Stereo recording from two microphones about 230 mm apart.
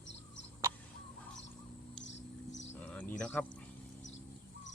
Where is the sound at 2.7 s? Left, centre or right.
Centre.